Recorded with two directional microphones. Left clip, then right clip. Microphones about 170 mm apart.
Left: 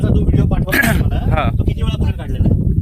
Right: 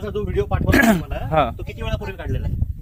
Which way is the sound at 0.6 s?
10° right (ahead or behind).